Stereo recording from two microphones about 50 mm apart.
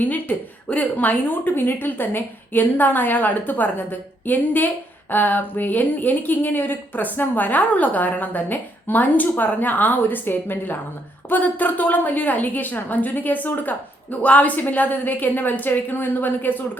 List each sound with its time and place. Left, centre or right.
0.0 s speech: left